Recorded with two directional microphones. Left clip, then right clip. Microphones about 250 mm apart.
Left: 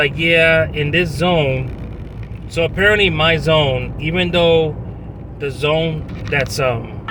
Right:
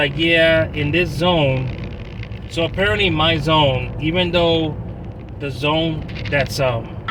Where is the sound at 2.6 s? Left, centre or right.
Centre.